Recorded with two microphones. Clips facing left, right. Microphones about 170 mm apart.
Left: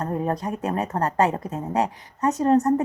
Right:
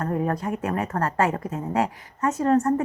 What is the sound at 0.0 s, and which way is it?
Speech, 20° left (ahead or behind).